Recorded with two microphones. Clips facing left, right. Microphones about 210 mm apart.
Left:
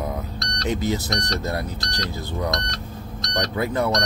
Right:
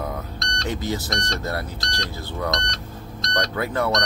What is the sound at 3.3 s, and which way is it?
Speech, 15° left (ahead or behind).